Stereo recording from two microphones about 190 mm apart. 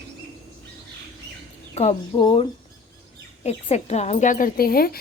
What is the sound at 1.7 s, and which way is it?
A woman's voice, 35° left (ahead or behind).